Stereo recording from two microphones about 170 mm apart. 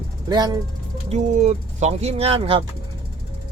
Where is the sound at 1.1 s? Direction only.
40° right (ahead or behind).